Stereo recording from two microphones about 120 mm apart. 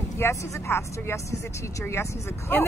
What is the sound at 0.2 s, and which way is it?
Speech, 20° left (ahead or behind).